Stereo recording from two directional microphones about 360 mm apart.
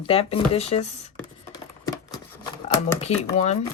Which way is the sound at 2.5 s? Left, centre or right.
Centre.